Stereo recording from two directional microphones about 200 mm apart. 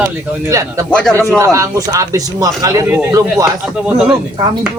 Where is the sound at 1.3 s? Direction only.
15° right (ahead or behind).